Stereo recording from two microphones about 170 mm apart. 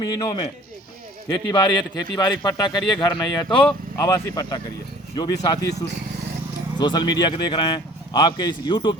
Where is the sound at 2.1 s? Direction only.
20° left (ahead or behind).